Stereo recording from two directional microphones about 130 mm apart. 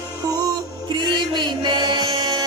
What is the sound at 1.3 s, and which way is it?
Music, 35° right (ahead or behind).